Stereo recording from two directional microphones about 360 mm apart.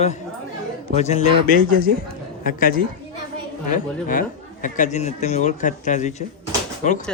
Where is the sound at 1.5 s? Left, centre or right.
Right.